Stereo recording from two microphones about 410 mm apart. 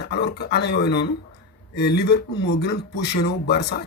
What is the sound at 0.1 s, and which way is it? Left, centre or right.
Speech, left.